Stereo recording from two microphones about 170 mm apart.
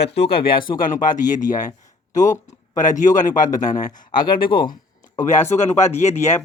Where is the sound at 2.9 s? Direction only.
50° left (ahead or behind).